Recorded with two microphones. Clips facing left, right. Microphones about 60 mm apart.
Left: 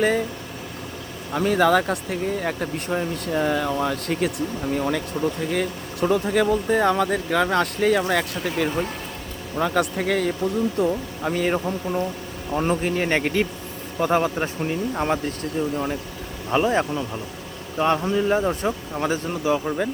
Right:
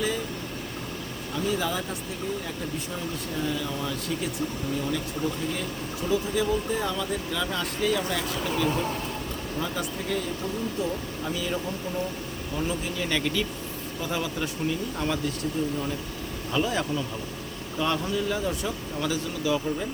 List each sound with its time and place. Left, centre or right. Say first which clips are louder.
1.3 s speech: left 10 dB; left